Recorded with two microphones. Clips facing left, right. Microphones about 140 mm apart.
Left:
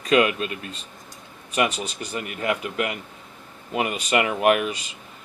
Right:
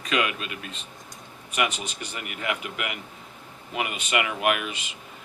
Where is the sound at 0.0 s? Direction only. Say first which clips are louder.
Left 7 dB; 40° left (ahead or behind).